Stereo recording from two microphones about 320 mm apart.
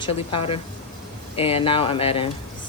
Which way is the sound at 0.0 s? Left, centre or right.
Centre.